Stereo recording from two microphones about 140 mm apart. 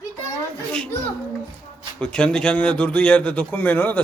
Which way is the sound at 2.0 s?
5° left (ahead or behind).